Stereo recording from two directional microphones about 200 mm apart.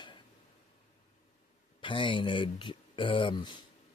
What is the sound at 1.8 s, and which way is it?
Speech, 25° left (ahead or behind).